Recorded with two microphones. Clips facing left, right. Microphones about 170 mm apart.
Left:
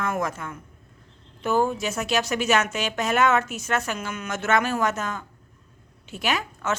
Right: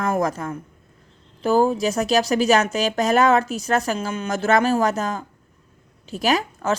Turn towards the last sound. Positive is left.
turn(degrees=-35)  # may be behind; listen again after turning